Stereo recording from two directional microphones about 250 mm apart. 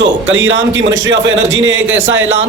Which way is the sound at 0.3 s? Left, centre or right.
Right.